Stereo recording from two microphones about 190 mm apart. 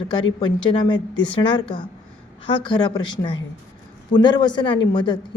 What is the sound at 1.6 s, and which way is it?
A woman's voice, 25° left (ahead or behind).